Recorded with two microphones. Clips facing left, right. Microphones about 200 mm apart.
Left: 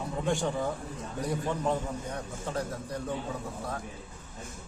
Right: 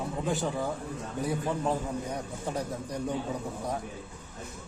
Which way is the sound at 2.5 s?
15° right (ahead or behind).